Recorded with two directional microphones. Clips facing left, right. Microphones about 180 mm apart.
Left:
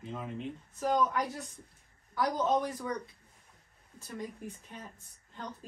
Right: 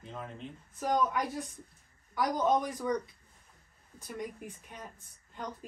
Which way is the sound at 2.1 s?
15° right (ahead or behind).